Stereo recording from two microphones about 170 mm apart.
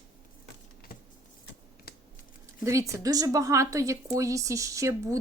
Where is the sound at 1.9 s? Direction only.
65° left (ahead or behind).